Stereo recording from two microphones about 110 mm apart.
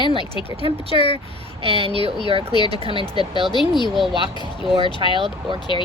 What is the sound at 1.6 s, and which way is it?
Speech, 60° right (ahead or behind).